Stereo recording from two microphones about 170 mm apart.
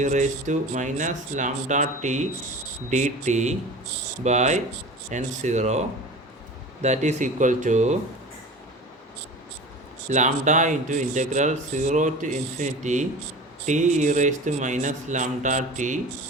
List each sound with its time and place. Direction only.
0.0 s speech: 45° right (ahead or behind)
6.8 s speech: 40° right (ahead or behind)
10.1 s speech: 45° right (ahead or behind)